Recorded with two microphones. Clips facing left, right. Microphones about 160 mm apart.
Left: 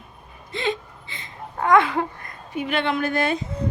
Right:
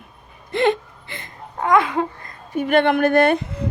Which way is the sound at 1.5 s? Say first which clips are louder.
Even; 20° right (ahead or behind).